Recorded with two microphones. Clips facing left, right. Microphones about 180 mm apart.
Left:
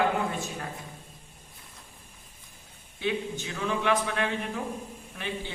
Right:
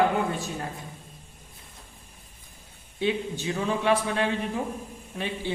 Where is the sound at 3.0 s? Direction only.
30° right (ahead or behind).